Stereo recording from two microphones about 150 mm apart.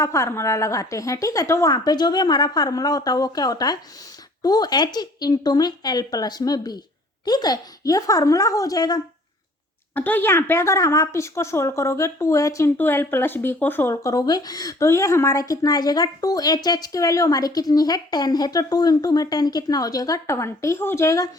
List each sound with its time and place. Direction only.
0.0 s a woman's voice: 20° left (ahead or behind)
9.9 s a woman's voice: 10° left (ahead or behind)